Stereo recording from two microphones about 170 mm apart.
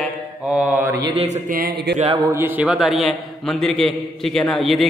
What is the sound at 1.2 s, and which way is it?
Speech, 50° right (ahead or behind).